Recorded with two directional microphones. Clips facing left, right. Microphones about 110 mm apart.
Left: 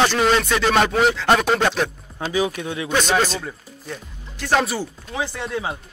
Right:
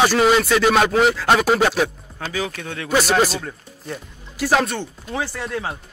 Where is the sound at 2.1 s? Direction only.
20° left (ahead or behind).